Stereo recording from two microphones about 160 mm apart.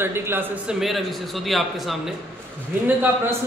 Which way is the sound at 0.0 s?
15° right (ahead or behind).